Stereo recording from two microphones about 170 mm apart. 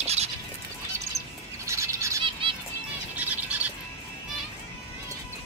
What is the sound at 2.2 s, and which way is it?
Music, 30° right (ahead or behind).